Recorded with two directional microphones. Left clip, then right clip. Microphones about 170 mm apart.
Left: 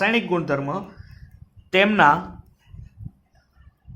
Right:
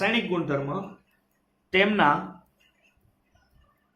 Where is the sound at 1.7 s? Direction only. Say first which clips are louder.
Left 5 dB; 55° left (ahead or behind).